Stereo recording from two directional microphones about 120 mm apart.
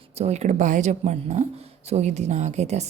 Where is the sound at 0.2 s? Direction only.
65° right (ahead or behind).